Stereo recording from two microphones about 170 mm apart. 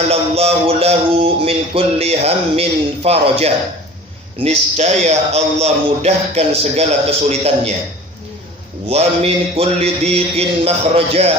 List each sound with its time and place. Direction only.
0.1 s music: 35° right (ahead or behind)
8.9 s music: 35° right (ahead or behind)